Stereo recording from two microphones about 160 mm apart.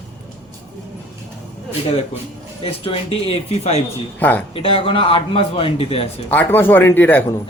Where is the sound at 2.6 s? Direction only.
35° left (ahead or behind).